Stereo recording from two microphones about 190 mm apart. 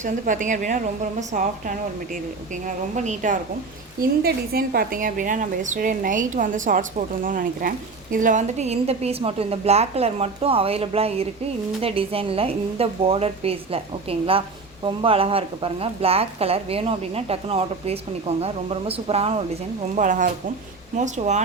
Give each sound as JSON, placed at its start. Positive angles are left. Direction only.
{"t": 0.0, "sound": "a woman's voice", "side_deg": -40}
{"t": 4.2, "sound": "a woman's voice", "side_deg": -55}
{"t": 20.0, "sound": "a woman's voice", "side_deg": -45}